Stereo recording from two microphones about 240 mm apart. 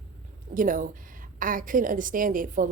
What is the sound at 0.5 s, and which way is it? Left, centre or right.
A woman's voice, right.